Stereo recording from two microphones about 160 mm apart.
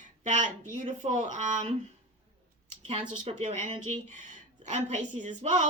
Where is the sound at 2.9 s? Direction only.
40° right (ahead or behind).